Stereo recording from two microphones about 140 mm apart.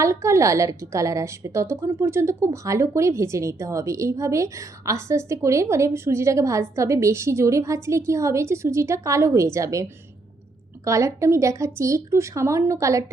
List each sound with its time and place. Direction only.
0.0 s a woman's voice: 20° right (ahead or behind)
10.8 s a woman's voice: 20° right (ahead or behind)